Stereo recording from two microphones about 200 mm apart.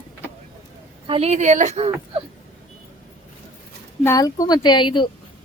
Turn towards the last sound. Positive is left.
turn(degrees=25)  # may be behind; listen again after turning